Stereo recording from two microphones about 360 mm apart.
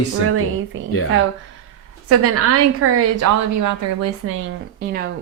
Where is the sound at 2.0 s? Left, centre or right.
Right.